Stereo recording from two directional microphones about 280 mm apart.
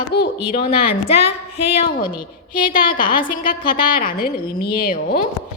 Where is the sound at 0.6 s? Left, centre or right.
Left.